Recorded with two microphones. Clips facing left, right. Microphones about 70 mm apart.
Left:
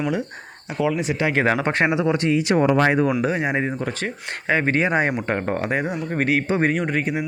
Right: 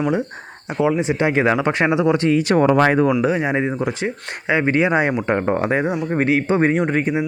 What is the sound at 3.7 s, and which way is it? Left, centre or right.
Speech, centre.